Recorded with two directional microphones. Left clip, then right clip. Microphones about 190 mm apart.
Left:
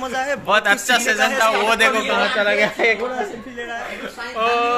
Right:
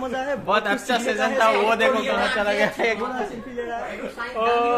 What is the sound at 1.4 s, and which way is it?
A man's voice, 10° left (ahead or behind).